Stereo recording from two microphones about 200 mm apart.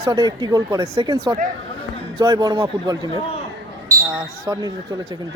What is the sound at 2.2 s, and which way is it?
Speech, 20° right (ahead or behind).